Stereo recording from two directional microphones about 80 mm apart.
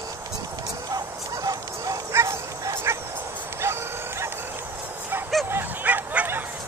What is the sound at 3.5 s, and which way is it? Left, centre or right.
Dog, right.